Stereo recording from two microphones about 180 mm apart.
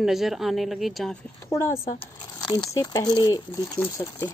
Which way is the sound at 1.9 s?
25° left (ahead or behind).